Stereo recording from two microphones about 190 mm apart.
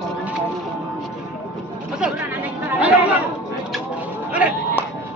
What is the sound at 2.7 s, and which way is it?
Chatter, 5° right (ahead or behind).